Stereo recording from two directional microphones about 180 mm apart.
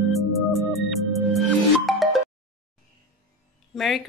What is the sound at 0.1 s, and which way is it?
Music, centre (ahead or behind).